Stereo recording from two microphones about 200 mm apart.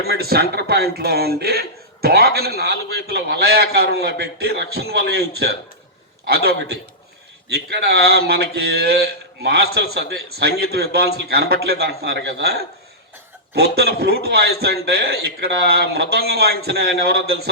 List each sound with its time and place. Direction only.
0.0 s speech: 50° right (ahead or behind)